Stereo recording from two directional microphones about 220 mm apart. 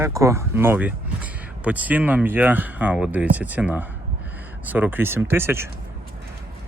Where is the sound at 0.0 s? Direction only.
15° right (ahead or behind).